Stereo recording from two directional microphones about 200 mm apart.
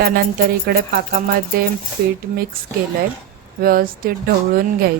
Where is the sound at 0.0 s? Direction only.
50° right (ahead or behind).